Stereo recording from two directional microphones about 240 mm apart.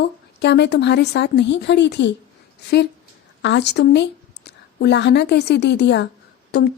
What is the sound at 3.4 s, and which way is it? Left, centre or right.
A woman's voice, left.